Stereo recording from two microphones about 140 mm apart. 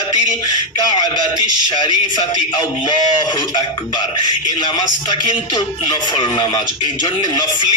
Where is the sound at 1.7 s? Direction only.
30° left (ahead or behind).